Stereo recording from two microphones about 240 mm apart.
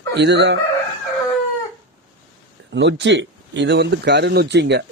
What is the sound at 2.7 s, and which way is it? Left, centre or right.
Speech, right.